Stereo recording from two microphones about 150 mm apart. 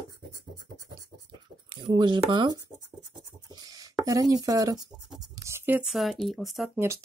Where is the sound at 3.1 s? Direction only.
25° right (ahead or behind).